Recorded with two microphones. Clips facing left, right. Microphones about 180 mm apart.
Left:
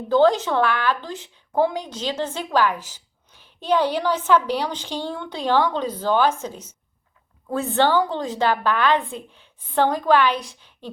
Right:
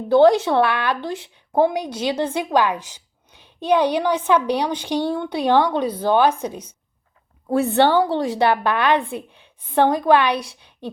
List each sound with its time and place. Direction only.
0.1 s a woman's voice: 15° right (ahead or behind)